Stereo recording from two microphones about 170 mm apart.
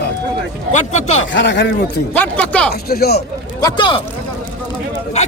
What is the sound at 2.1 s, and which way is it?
Speech, 10° left (ahead or behind).